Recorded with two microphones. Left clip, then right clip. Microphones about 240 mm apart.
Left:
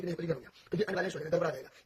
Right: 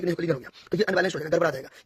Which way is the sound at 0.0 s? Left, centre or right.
Right.